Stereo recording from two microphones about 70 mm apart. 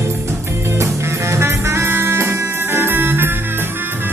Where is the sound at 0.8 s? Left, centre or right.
Right.